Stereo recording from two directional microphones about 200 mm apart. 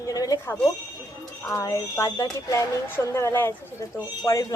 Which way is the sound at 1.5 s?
15° left (ahead or behind).